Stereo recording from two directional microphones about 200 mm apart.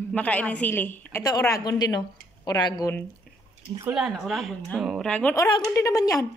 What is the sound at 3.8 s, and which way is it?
A woman's voice, 5° right (ahead or behind).